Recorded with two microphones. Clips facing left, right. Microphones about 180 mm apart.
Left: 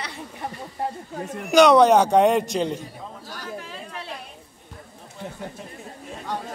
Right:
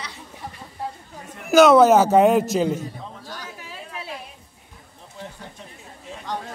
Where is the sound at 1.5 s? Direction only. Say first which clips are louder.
Right 2 dB; 5° right (ahead or behind).